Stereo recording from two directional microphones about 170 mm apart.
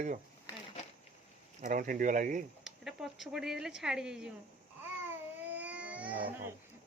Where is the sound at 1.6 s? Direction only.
50° right (ahead or behind).